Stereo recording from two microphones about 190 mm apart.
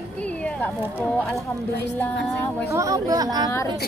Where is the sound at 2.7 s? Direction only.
15° right (ahead or behind).